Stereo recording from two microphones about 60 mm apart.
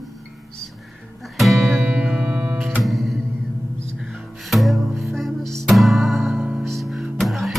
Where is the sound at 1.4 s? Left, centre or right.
Centre.